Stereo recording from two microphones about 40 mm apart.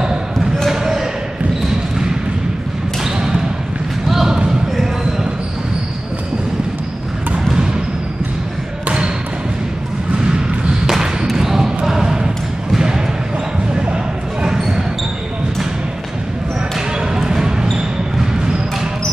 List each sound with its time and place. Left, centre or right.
0.0 s basketball bounce: centre
3.0 s basketball bounce: centre
4.1 s a sound: centre
4.5 s basketball bounce: centre
10.9 s a sound: centre
11.3 s basketball bounce: centre
17.1 s basketball bounce: centre